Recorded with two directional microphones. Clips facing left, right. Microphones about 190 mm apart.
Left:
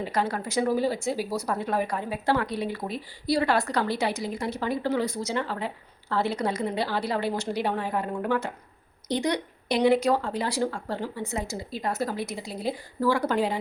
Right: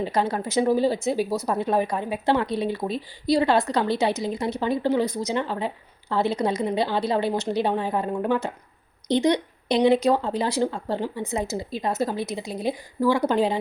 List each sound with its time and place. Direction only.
0.0 s speech: 25° right (ahead or behind)